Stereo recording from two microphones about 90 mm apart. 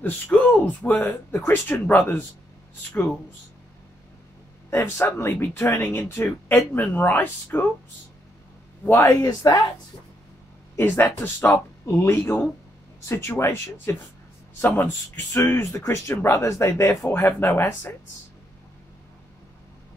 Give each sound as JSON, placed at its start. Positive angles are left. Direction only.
{"t": 0.3, "sound": "speech", "side_deg": 15}
{"t": 1.3, "sound": "speech", "side_deg": 25}
{"t": 4.6, "sound": "speech", "side_deg": 30}
{"t": 8.8, "sound": "speech", "side_deg": 30}
{"t": 10.8, "sound": "speech", "side_deg": 25}
{"t": 15.3, "sound": "speech", "side_deg": 30}